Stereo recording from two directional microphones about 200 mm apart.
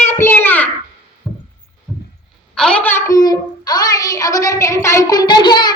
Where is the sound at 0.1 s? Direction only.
10° left (ahead or behind).